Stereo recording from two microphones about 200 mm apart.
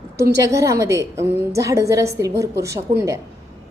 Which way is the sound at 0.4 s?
15° right (ahead or behind).